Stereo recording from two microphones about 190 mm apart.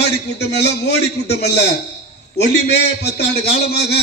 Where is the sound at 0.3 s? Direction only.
60° left (ahead or behind).